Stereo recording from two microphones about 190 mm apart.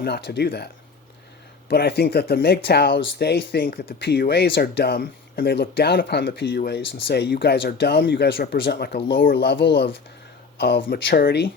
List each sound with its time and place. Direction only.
0.0 s speech: 55° left (ahead or behind)